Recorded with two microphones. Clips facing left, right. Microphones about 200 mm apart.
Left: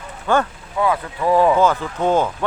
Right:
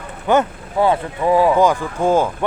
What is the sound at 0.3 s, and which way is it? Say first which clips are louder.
Speech: right 3 dB; 20° right (ahead or behind).